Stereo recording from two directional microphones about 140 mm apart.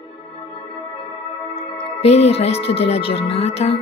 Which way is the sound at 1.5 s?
45° left (ahead or behind).